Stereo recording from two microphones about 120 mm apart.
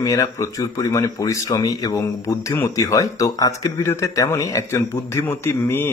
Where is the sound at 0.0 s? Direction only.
25° left (ahead or behind).